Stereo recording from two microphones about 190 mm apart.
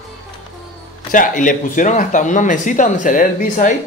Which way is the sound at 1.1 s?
45° left (ahead or behind).